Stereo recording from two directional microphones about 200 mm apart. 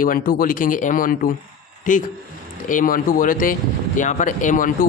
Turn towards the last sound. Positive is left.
turn(degrees=40)  # may be behind; listen again after turning